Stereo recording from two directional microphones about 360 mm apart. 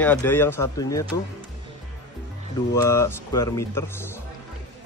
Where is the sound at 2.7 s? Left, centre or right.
Centre.